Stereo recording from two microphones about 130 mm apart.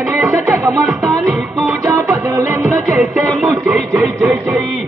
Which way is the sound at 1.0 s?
Centre (ahead or behind).